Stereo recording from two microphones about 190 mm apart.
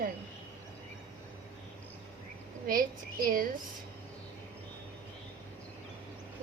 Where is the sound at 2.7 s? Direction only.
45° right (ahead or behind).